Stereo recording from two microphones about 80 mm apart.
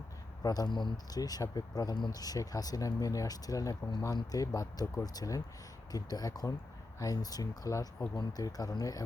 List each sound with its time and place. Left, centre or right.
0.4 s speech: left